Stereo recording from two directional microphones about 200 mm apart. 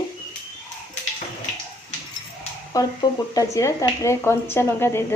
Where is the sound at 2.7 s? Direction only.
20° left (ahead or behind).